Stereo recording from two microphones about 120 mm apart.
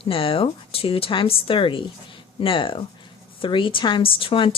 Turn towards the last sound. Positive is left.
turn(degrees=45)  # may be behind; listen again after turning